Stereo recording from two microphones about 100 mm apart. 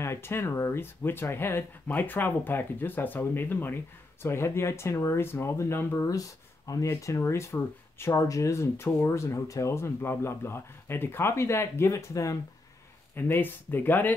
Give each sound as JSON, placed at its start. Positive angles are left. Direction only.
{"t": 0.0, "sound": "speech", "side_deg": 25}
{"t": 6.7, "sound": "speech", "side_deg": 35}
{"t": 13.1, "sound": "speech", "side_deg": 20}